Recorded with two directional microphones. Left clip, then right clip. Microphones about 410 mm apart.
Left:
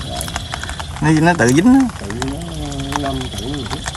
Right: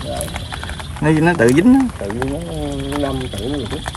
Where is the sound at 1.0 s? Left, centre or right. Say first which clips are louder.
Even; centre.